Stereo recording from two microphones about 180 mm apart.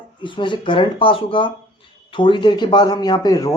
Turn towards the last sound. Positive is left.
turn(degrees=20)  # may be behind; listen again after turning